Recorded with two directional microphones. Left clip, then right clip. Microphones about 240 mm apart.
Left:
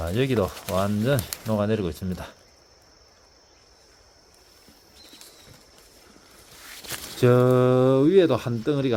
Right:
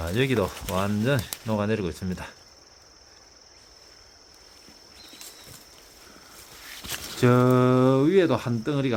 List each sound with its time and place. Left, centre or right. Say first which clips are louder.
0.0 s speech: left 1 dB; centre
6.6 s a sound: right 1 dB; left
7.2 s speech: left 2 dB; centre